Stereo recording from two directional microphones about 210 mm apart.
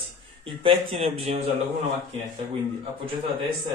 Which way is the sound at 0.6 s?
25° right (ahead or behind).